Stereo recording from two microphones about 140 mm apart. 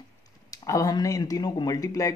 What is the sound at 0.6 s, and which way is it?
Speech, 25° left (ahead or behind).